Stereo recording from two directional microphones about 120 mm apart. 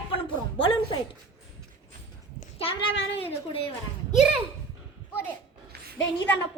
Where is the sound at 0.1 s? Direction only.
50° left (ahead or behind).